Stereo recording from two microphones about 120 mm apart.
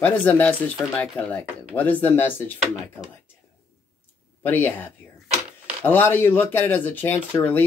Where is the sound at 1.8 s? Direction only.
15° left (ahead or behind).